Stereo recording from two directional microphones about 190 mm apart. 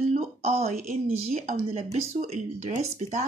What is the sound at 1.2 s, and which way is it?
Speech, 35° right (ahead or behind).